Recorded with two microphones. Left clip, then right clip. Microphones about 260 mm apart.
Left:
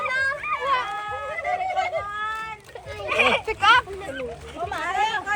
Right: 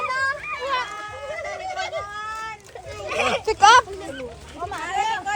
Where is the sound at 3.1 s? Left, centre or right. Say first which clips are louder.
Left 2 dB; centre.